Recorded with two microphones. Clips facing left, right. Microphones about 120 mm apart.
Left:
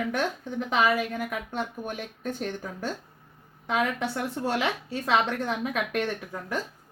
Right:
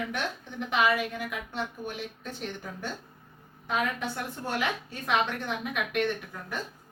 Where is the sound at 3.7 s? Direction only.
85° left.